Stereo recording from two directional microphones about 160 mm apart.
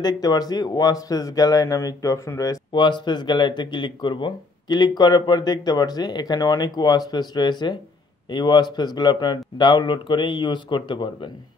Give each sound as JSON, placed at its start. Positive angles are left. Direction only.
{"t": 0.0, "sound": "speech", "side_deg": 25}